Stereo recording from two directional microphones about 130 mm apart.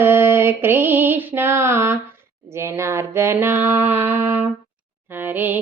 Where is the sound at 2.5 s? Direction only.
20° right (ahead or behind).